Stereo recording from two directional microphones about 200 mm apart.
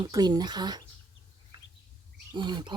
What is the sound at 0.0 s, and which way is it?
Bird, 20° right (ahead or behind).